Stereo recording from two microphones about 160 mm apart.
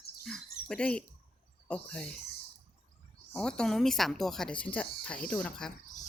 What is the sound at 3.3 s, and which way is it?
Speech, 5° left (ahead or behind).